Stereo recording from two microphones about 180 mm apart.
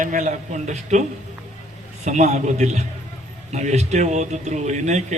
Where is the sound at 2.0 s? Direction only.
40° right (ahead or behind).